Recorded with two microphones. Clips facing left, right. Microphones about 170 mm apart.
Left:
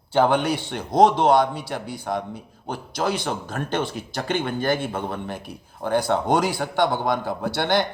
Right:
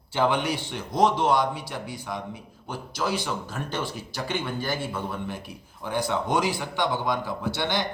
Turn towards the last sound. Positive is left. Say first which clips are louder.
# left 5 dB
turn(degrees=65)  # may be behind; listen again after turning